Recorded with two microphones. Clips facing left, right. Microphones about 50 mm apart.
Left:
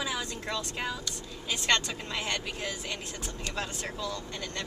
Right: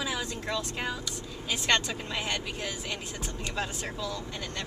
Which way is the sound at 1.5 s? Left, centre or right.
Centre.